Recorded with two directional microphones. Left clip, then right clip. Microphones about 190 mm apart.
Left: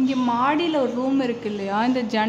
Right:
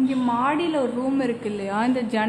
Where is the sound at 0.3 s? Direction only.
10° left (ahead or behind).